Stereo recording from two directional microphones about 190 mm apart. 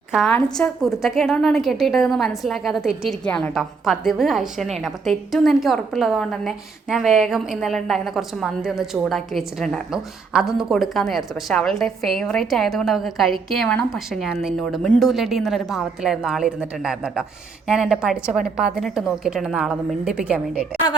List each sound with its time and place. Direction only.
0.1 s a woman's voice: 5° left (ahead or behind)